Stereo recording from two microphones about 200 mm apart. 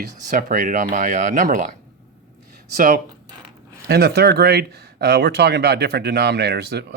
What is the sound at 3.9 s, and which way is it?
Speech, 55° right (ahead or behind).